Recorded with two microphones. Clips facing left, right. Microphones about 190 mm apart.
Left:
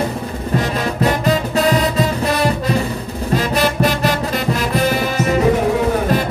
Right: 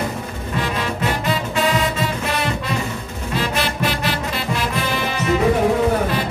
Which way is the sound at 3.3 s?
40° left (ahead or behind).